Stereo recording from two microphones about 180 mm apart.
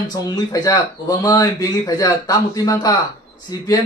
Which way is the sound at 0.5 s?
20° left (ahead or behind).